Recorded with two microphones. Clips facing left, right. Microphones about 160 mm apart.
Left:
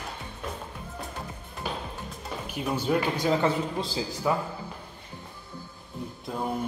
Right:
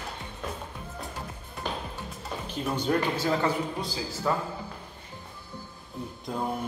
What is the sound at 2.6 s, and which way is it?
Speech, 5° left (ahead or behind).